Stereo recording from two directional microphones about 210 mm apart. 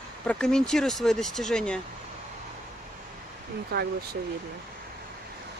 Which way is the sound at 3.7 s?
50° right (ahead or behind).